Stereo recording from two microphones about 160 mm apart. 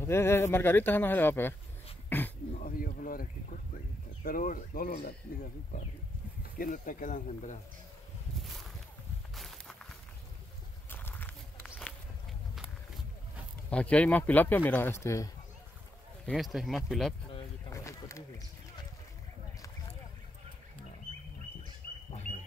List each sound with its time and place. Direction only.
0.0 s speech: 15° left (ahead or behind)
2.0 s throat clearing: 10° left (ahead or behind)
2.6 s a sound: 60° left (ahead or behind)
4.2 s speech: 65° left (ahead or behind)
6.6 s speech: 55° left (ahead or behind)
9.3 s a sound: centre (ahead or behind)
10.9 s walk: 10° left (ahead or behind)
12.5 s run: centre (ahead or behind)
13.7 s speech: 10° left (ahead or behind)
16.3 s speech: centre (ahead or behind)
17.8 s a sound: 20° left (ahead or behind)
22.1 s bird: 45° left (ahead or behind)